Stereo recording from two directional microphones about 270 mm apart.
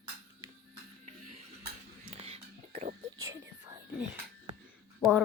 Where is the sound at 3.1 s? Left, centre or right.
Centre.